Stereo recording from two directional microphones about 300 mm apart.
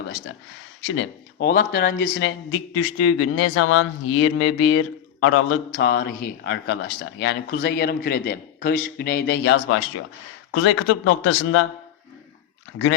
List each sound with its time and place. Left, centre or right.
0.9 s speech: left
2.1 s speech: left
5.7 s speech: left